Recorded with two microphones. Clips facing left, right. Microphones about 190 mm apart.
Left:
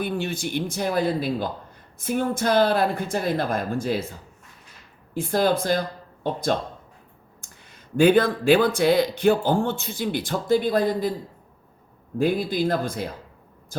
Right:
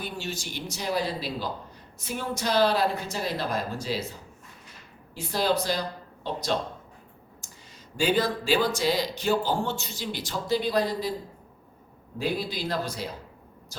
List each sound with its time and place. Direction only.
0.0 s a woman's voice: 55° left (ahead or behind)
5.1 s a woman's voice: 50° left (ahead or behind)
7.9 s speech: 55° left (ahead or behind)
12.1 s a woman's voice: 50° left (ahead or behind)